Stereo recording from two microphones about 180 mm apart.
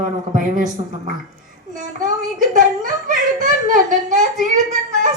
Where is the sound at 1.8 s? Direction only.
45° right (ahead or behind).